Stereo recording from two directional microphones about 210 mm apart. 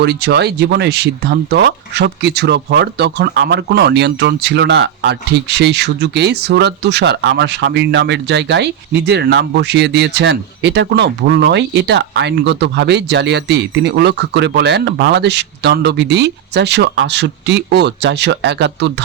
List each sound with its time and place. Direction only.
0.0 s speech: 50° right (ahead or behind)